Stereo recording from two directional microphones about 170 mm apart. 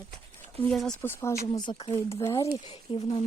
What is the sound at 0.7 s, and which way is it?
Speech, 5° left (ahead or behind).